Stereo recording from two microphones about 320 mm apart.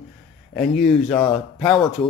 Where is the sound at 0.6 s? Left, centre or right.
Centre.